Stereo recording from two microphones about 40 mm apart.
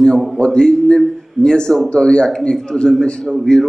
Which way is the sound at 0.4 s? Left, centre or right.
Centre.